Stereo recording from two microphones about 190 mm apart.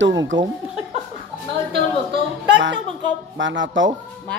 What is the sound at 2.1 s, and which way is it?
Music, 75° right (ahead or behind).